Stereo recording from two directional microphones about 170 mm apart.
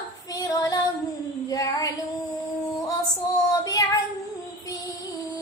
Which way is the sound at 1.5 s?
20° left (ahead or behind).